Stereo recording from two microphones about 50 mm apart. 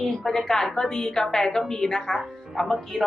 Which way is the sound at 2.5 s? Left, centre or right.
Centre.